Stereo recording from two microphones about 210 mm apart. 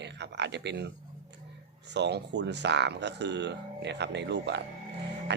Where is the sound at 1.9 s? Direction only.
55° right (ahead or behind).